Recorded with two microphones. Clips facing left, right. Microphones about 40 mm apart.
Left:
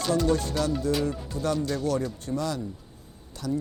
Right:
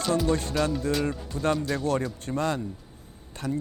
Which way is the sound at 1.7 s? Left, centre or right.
Right.